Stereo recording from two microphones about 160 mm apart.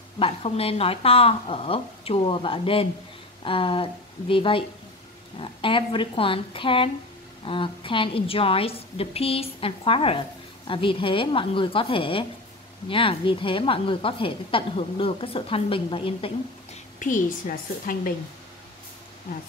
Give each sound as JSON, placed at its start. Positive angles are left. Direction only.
{"t": 0.2, "sound": "a woman's voice", "side_deg": 35}
{"t": 17.0, "sound": "a woman's voice", "side_deg": 55}